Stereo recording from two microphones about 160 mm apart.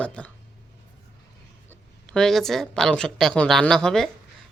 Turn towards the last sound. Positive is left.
turn(degrees=5)  # may be behind; listen again after turning